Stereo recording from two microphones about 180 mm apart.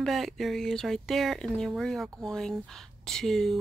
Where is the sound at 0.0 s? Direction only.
Centre (ahead or behind).